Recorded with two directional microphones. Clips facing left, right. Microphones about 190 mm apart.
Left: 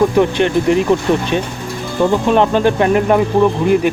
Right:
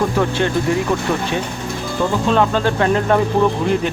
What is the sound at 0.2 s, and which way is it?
Speech, 20° left (ahead or behind).